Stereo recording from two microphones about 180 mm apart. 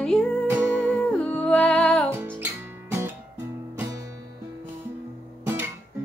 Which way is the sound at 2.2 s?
10° right (ahead or behind).